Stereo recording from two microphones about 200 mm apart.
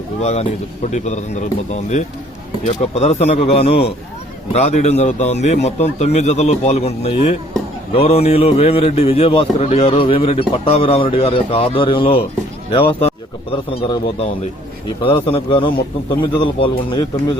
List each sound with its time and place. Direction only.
0.2 s a man's voice: 35° left (ahead or behind)
13.8 s a man's voice: 20° left (ahead or behind)